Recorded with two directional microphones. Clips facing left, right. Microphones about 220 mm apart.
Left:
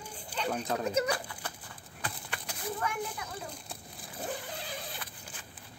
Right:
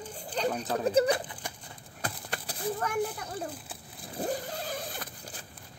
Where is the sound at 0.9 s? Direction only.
30° right (ahead or behind).